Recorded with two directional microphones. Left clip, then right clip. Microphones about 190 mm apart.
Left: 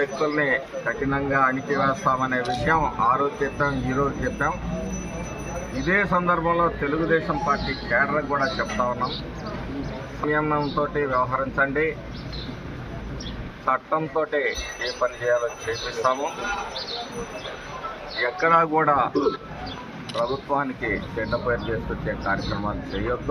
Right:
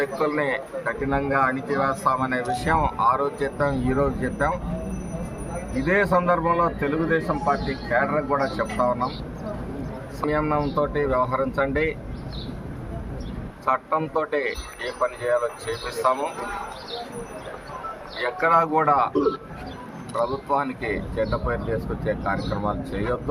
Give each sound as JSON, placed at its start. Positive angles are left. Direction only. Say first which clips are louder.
{"t": 0.0, "sound": "a man's voice", "louder": "even", "side_deg": -35}
{"t": 5.8, "sound": "a man's voice", "louder": "right 1 dB", "side_deg": -40}
{"t": 10.2, "sound": "a man's voice", "louder": "even", "side_deg": -35}
{"t": 13.7, "sound": "a man's voice", "louder": "even", "side_deg": -35}
{"t": 18.2, "sound": "a man's voice", "louder": "even", "side_deg": -40}
{"t": 20.1, "sound": "a man's voice", "louder": "right 1 dB", "side_deg": -35}